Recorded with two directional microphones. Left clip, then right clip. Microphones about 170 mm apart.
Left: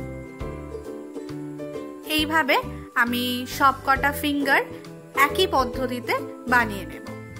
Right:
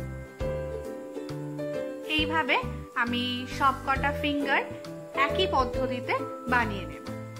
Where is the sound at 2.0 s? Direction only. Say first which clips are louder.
Left 6 dB; 35° left (ahead or behind).